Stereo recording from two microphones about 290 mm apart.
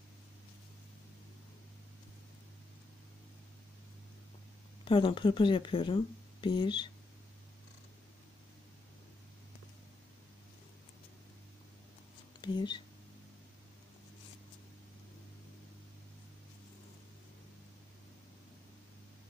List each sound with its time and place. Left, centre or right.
4.8 s speech: centre
12.4 s speech: centre